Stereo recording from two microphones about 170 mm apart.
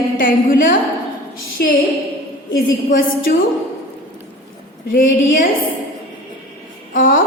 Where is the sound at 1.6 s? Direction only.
70° left (ahead or behind).